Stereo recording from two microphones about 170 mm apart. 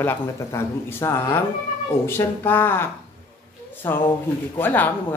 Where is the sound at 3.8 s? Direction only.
15° left (ahead or behind).